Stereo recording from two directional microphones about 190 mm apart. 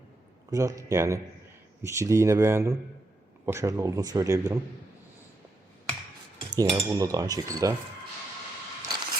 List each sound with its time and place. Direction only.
0.5 s speech: 15° right (ahead or behind)
6.5 s cutlery: 20° right (ahead or behind)